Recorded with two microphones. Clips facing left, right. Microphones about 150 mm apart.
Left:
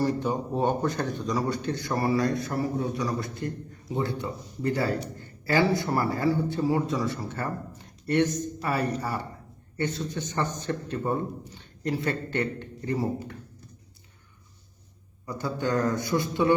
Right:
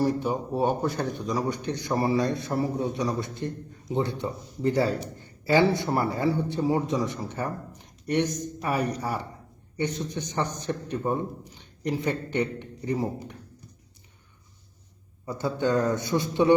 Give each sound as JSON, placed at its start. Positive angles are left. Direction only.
{"t": 0.0, "sound": "a man's voice", "side_deg": -10}
{"t": 15.3, "sound": "a man's voice", "side_deg": -25}